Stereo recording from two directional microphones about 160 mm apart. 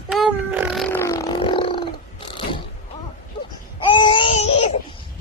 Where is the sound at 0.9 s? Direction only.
20° left (ahead or behind).